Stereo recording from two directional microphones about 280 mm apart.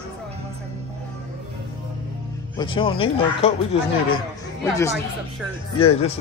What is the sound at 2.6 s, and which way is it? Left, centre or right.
Speech, centre.